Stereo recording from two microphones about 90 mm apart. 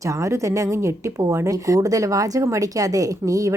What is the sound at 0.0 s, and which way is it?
A woman's voice, 35° right (ahead or behind).